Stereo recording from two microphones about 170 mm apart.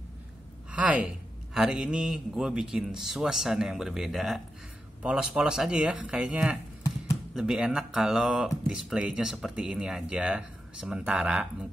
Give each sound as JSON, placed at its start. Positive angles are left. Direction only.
{"t": 0.7, "sound": "a man's voice", "side_deg": -5}